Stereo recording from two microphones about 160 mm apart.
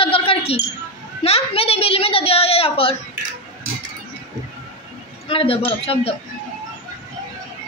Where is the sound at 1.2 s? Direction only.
40° left (ahead or behind).